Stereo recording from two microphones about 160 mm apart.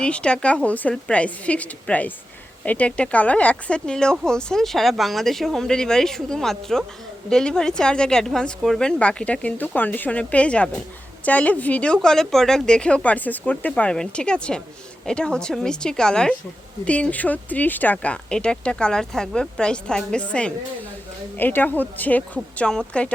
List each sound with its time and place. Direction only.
0.0 s speech: 5° left (ahead or behind)